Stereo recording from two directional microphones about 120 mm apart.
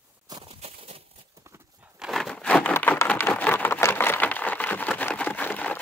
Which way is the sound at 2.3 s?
10° left (ahead or behind).